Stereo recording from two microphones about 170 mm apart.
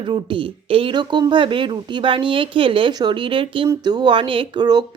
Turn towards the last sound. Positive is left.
turn(degrees=-25)  # may be behind; listen again after turning